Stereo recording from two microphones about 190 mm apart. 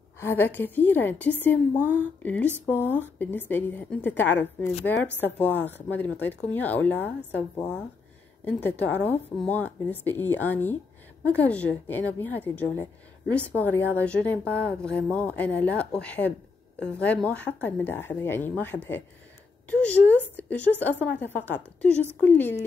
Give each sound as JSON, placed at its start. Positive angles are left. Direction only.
{"t": 0.2, "sound": "speech", "side_deg": 10}